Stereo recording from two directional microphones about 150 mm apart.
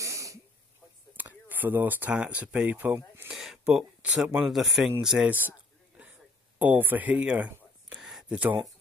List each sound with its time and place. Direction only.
0.0 s wheeze: 20° right (ahead or behind)
1.1 s speech: 10° right (ahead or behind)
6.6 s speech: 10° right (ahead or behind)